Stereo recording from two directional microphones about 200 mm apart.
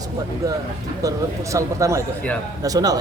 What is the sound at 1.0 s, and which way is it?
A man's voice, 15° right (ahead or behind).